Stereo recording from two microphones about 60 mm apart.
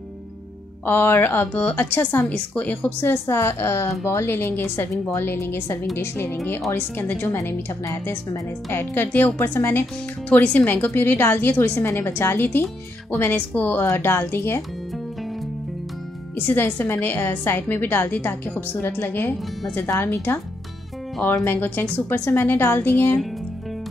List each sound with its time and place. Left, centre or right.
0.8 s a woman's voice: left
2.2 s a woman's voice: left
8.7 s a woman's voice: left
10.3 s a woman's voice: left
13.6 s a woman's voice: left
16.3 s a woman's voice: left
21.5 s a woman's voice: left
21.9 s a woman's voice: left
22.3 s a woman's voice: left